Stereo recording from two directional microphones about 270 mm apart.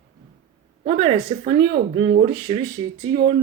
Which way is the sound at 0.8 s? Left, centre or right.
Right.